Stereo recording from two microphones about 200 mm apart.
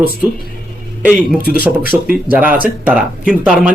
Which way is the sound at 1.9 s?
15° right (ahead or behind).